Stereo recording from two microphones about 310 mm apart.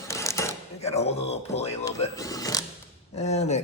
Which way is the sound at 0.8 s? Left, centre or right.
Centre.